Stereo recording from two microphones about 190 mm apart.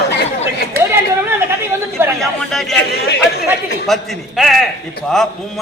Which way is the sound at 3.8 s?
Centre (ahead or behind).